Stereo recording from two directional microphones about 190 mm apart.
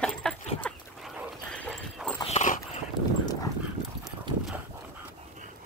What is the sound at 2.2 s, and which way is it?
Dog, 35° left (ahead or behind).